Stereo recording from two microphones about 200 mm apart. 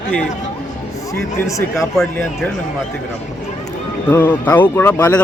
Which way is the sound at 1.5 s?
15° left (ahead or behind).